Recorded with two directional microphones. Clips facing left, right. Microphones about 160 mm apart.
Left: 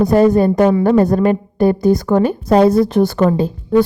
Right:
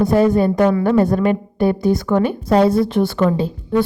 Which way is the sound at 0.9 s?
40° left (ahead or behind).